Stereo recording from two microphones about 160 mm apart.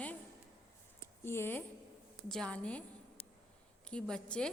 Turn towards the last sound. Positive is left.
turn(degrees=5)  # may be behind; listen again after turning